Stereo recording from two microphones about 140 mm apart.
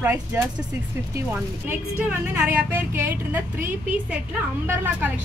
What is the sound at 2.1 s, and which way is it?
Speech, 10° right (ahead or behind).